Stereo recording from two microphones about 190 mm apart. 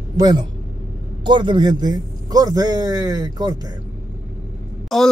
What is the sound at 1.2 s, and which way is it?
A man's voice, 25° right (ahead or behind).